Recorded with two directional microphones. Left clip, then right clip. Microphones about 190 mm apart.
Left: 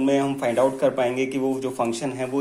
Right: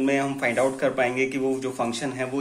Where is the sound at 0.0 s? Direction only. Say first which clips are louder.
Left 2 dB; 15° left (ahead or behind).